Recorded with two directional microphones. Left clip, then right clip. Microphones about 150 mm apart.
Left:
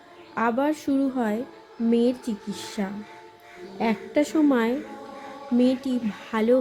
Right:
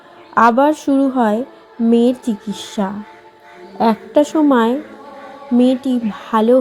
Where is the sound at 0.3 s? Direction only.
20° right (ahead or behind).